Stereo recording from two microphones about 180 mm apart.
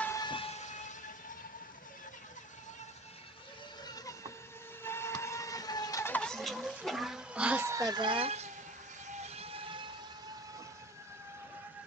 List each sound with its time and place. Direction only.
0.0 s train: 15° left (ahead or behind)
0.3 s train: 35° left (ahead or behind)
3.8 s a sound: 20° left (ahead or behind)
4.8 s vehicle: 15° left (ahead or behind); by 9.8 s 30° right (ahead or behind)